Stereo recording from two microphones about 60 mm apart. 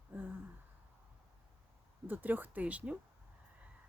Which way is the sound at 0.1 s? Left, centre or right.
Right.